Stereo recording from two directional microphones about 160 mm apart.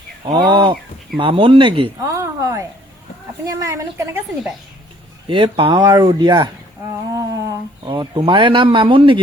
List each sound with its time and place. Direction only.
0.3 s speech: 30° right (ahead or behind)
2.0 s a sound: 20° right (ahead or behind)
3.4 s speech: 20° right (ahead or behind)
5.3 s speech: 30° right (ahead or behind)
7.1 s humming: 20° right (ahead or behind)
7.9 s speech: 30° right (ahead or behind)